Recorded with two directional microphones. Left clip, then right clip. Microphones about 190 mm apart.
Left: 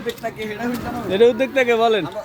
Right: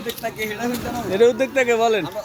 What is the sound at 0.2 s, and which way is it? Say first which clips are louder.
Speech: right 1 dB; 20° right (ahead or behind).